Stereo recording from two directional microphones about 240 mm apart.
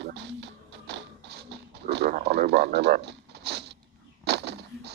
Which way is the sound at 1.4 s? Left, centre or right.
Right.